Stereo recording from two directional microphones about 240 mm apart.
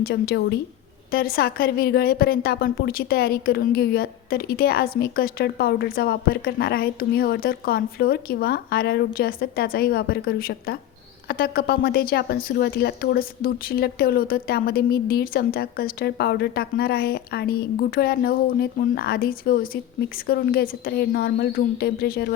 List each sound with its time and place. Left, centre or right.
0.0 s a woman's voice: left